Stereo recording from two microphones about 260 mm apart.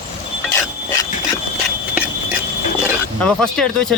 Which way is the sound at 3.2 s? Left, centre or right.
Centre.